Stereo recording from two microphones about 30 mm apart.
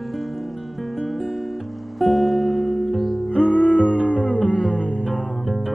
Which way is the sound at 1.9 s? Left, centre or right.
Centre.